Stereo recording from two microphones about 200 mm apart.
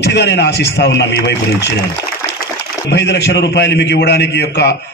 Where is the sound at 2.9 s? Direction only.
60° left (ahead or behind).